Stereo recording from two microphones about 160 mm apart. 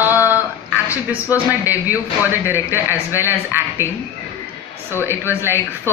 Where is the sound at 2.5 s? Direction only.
15° right (ahead or behind).